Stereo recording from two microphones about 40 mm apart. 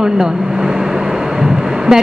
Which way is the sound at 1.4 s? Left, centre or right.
Centre.